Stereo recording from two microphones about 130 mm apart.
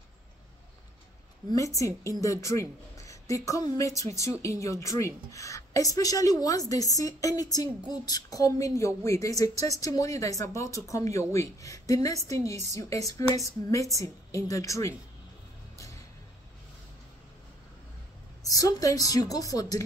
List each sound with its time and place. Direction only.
1.5 s a woman's voice: 25° left (ahead or behind)
18.4 s a woman's voice: 25° left (ahead or behind)